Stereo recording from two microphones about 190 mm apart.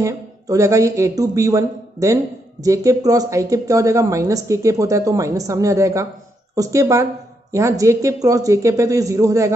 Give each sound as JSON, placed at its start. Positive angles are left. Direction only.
{"t": 0.0, "sound": "speech", "side_deg": -15}